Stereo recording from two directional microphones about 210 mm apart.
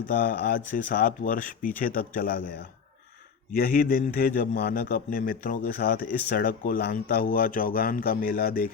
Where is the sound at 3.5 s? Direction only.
45° left (ahead or behind).